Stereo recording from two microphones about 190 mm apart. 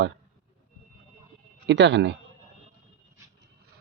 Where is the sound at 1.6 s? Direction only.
65° right (ahead or behind).